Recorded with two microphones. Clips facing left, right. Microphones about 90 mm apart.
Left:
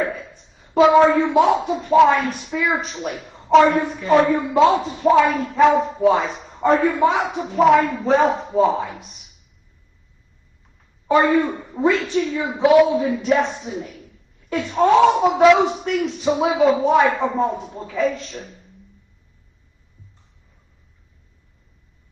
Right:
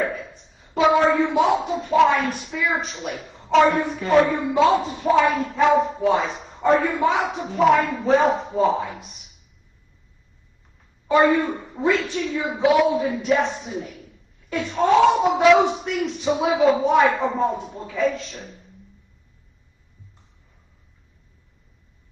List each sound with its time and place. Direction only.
0.3 s a sound: centre (ahead or behind)
1.0 s speech: centre (ahead or behind)
4.1 s speech: centre (ahead or behind)
11.1 s speech: centre (ahead or behind)